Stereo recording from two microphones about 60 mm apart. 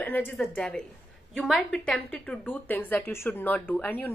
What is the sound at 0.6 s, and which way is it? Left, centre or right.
A woman's voice, centre.